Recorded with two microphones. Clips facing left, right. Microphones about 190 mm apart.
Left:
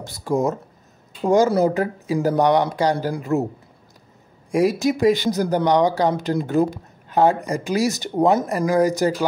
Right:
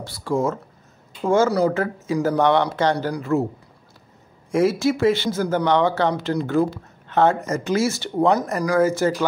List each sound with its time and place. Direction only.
0.0 s speech: 20° left (ahead or behind)
4.5 s speech: 15° left (ahead or behind)